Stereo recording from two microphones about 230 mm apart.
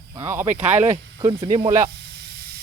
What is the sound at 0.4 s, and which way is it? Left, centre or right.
Speech, right.